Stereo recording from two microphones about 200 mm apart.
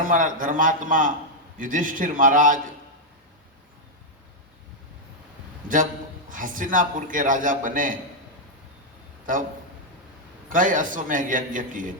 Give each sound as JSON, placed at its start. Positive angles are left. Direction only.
{"t": 0.0, "sound": "a man's voice", "side_deg": -40}
{"t": 5.6, "sound": "a man's voice", "side_deg": -40}
{"t": 10.5, "sound": "a man's voice", "side_deg": -40}